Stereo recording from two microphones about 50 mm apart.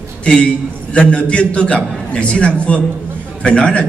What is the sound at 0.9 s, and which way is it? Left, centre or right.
A man's voice, left.